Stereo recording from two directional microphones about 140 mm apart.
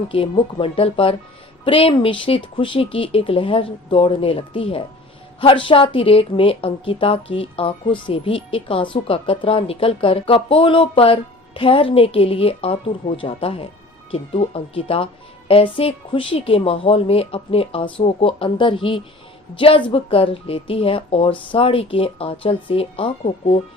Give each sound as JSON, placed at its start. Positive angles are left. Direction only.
{"t": 0.1, "sound": "a woman's voice", "side_deg": 40}